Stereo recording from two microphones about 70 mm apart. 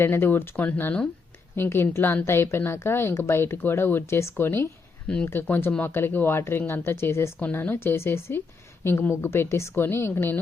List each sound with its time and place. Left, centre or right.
0.0 s speech: left
5.0 s speech: centre
5.3 s speech: left